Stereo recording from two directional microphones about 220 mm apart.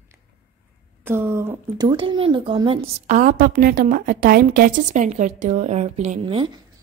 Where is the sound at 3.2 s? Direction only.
35° right (ahead or behind).